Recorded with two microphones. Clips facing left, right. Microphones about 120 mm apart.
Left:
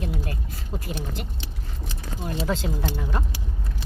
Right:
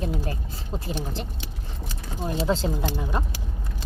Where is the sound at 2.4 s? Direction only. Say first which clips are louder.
Right 3 dB; 30° right (ahead or behind).